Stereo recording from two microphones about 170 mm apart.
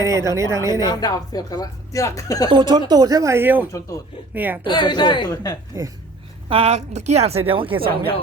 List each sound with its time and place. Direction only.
0.0 s speech: 20° right (ahead or behind)
0.7 s speech: 25° left (ahead or behind)
2.5 s speech: 25° right (ahead or behind); by 3.7 s 10° right (ahead or behind)
3.7 s speech: 20° left (ahead or behind)
4.4 s speech: 10° right (ahead or behind)
4.6 s speech: 25° left (ahead or behind)
6.5 s a woman's voice: 35° right (ahead or behind)